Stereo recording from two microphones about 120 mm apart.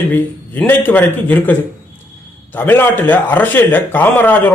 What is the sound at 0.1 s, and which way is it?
A man's voice, 15° left (ahead or behind).